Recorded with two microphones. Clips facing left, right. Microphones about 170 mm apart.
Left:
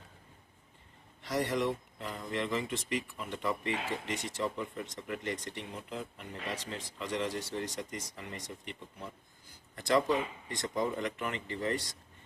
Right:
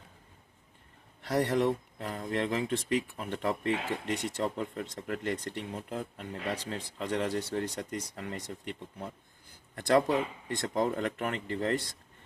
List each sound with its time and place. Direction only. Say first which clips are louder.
1.2 s speech: right 4 dB; 55° right (ahead or behind)